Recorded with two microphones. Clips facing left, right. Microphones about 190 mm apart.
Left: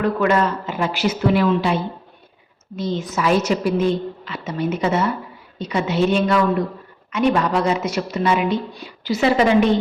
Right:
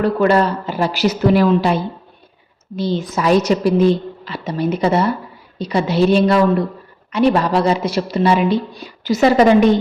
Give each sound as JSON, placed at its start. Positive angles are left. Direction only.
{"t": 0.0, "sound": "a woman's voice", "side_deg": -35}